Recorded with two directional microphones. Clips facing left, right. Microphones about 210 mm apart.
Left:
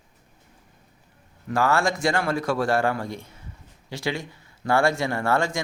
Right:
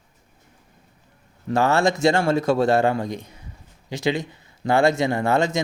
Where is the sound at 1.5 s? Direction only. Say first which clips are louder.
Right 3 dB; 25° right (ahead or behind).